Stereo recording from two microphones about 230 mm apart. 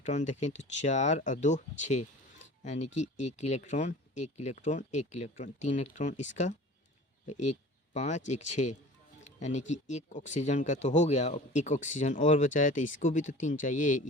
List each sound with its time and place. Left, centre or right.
0.0 s speech: left
7.9 s speech: left